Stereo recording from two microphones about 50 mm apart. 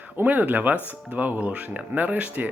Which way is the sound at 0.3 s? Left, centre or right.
Right.